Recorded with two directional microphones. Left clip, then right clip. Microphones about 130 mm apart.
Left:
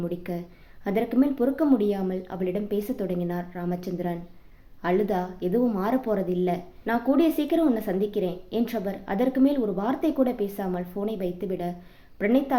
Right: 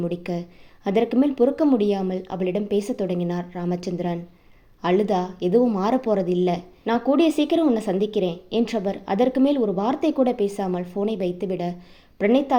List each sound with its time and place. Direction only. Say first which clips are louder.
0.0 s a woman's voice: right 4 dB; 45° right (ahead or behind)